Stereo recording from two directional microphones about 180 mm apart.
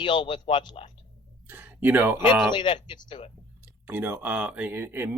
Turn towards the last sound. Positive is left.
turn(degrees=-10)  # may be behind; listen again after turning